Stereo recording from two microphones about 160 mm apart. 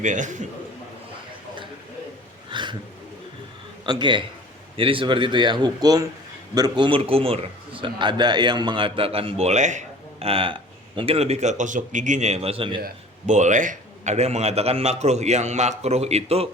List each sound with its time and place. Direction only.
0.0 s a man's voice: 50° right (ahead or behind)
2.5 s a sound: 30° right (ahead or behind)
3.8 s a man's voice: 30° right (ahead or behind)
13.2 s a man's voice: 50° right (ahead or behind)